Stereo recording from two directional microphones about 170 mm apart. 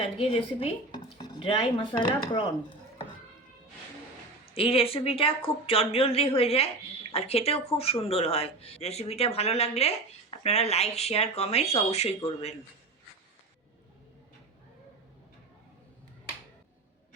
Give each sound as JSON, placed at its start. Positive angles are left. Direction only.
{"t": 0.0, "sound": "speech", "side_deg": 35}
{"t": 4.5, "sound": "speech", "side_deg": 35}